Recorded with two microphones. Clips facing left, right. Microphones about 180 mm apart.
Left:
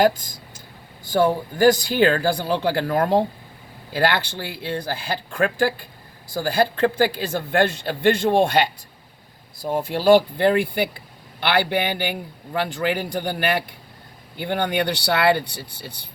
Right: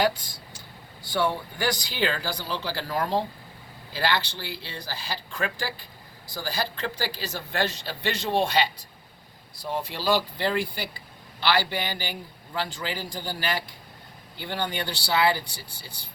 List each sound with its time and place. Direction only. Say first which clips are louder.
0.0 s speech: left 6 dB; 45° left (ahead or behind); by 16.0 s 65° left (ahead or behind)